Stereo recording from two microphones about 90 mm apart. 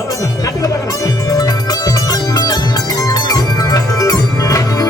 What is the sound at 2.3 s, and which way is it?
Music, 45° left (ahead or behind).